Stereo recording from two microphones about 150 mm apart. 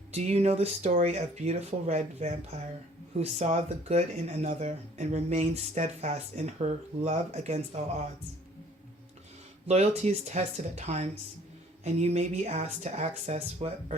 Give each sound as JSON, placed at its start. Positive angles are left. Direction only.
{"t": 0.1, "sound": "speech", "side_deg": -45}
{"t": 9.6, "sound": "speech", "side_deg": -45}